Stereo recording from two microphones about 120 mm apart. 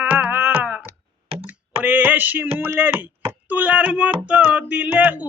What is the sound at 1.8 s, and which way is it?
Speech, 15° right (ahead or behind).